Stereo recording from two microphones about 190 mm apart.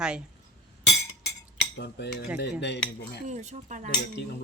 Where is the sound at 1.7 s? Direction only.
65° left (ahead or behind).